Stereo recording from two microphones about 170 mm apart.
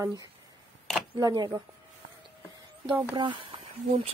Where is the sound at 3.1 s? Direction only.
30° right (ahead or behind).